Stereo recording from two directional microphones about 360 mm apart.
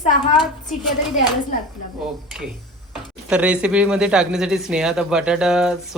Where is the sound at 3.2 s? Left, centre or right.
Centre.